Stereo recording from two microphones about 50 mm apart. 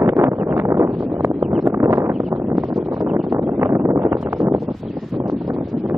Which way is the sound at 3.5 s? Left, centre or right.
Right.